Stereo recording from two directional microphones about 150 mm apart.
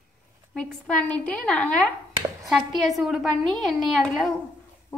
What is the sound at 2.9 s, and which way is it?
A woman's voice, centre (ahead or behind).